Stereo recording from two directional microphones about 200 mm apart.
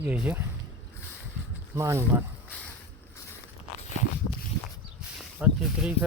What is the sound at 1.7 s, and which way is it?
Speech, 15° right (ahead or behind).